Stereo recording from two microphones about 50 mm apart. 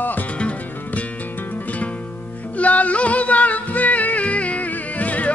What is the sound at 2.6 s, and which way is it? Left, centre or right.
Music, left.